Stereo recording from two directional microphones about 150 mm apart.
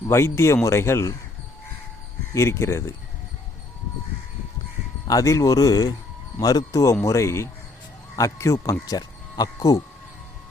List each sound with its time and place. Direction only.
0.1 s speech: 15° left (ahead or behind)
2.3 s speech: 15° left (ahead or behind)
5.0 s speech: 20° left (ahead or behind)